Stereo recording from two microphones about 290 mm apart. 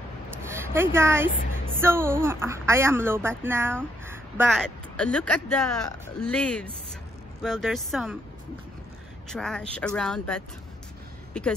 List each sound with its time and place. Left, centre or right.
0.5 s a sound: centre
0.9 s a woman's voice: centre
9.3 s speech: centre